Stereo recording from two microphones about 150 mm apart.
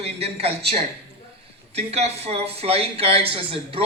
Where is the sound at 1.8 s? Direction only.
45° right (ahead or behind).